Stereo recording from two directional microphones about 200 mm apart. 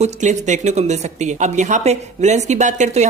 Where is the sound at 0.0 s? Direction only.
35° right (ahead or behind).